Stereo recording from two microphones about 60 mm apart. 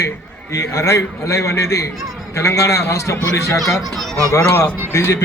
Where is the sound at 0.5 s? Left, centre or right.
Left.